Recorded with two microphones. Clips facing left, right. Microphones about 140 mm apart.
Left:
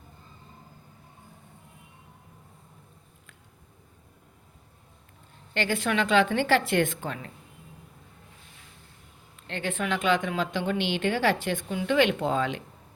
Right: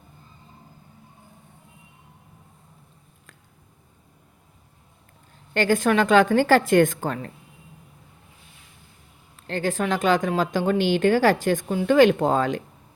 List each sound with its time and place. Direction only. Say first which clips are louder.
5.5 s a woman's voice: right 7 dB; 45° right (ahead or behind)
9.3 s a woman's voice: right 7 dB; 40° right (ahead or behind)